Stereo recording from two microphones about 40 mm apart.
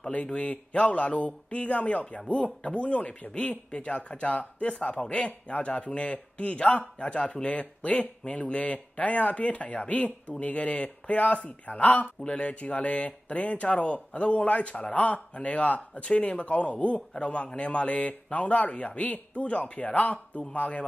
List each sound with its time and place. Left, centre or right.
0.1 s speech: left